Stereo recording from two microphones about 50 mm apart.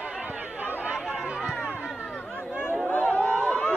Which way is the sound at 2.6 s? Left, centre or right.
Left.